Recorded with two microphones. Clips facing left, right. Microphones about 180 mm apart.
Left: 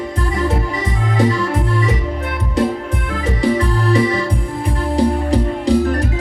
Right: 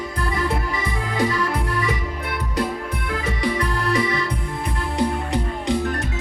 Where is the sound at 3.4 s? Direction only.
30° left (ahead or behind).